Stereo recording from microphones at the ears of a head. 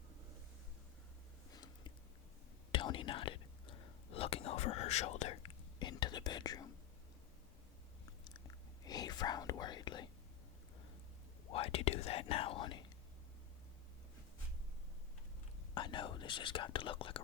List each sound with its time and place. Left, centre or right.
1.5 s a sound: left
2.7 s whispering: left
8.0 s whispering: left
11.4 s whispering: left
15.7 s whispering: left